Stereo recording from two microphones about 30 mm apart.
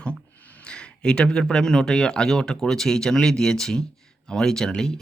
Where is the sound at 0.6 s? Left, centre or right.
Left.